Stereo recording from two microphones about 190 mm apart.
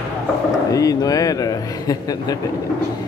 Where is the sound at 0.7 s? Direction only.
20° left (ahead or behind).